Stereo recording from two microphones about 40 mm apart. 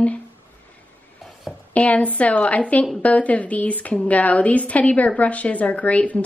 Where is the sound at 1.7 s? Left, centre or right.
Left.